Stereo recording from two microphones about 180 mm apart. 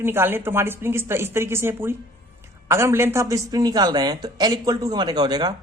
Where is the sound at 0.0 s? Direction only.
15° right (ahead or behind).